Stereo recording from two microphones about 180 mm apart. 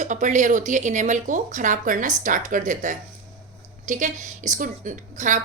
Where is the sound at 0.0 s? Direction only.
45° right (ahead or behind).